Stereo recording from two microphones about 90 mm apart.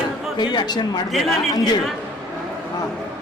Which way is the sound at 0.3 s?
55° left (ahead or behind).